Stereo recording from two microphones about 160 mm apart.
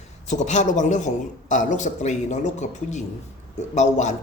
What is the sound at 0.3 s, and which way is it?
A man's voice, 50° left (ahead or behind).